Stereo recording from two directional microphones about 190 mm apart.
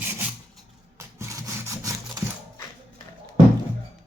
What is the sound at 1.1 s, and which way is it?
Sawing, 15° right (ahead or behind).